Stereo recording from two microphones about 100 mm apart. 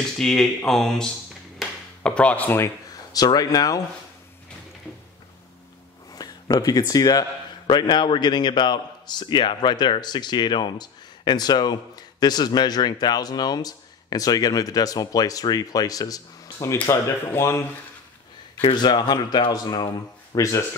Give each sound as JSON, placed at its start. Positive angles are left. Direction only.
{"t": 0.2, "sound": "speech", "side_deg": 5}
{"t": 1.6, "sound": "a sound", "side_deg": 10}
{"t": 3.1, "sound": "speech", "side_deg": 40}
{"t": 6.1, "sound": "a man's voice", "side_deg": 40}
{"t": 16.9, "sound": "speech", "side_deg": 30}
{"t": 18.6, "sound": "a man's voice", "side_deg": 50}